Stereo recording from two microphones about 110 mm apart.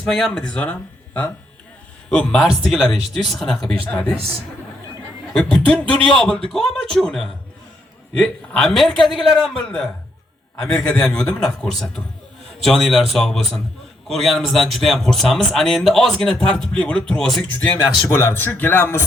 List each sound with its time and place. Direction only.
0.0 s speech: 5° left (ahead or behind)
2.4 s speech: 5° right (ahead or behind)
5.4 s speech: 5° left (ahead or behind)
8.5 s speech: 5° left (ahead or behind)
17.5 s speech: 15° left (ahead or behind)